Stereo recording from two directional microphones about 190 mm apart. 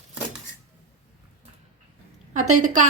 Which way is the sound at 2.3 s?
40° right (ahead or behind).